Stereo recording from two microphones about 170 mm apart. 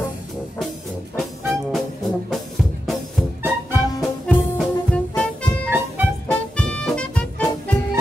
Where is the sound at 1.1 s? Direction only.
Centre (ahead or behind).